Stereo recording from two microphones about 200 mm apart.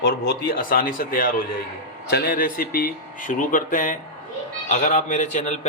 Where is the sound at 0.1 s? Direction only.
50° left (ahead or behind).